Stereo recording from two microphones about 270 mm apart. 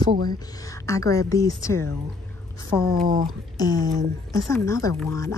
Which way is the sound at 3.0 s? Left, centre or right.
Right.